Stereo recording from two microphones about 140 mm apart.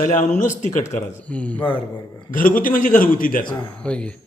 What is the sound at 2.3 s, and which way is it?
A man's voice, 80° left.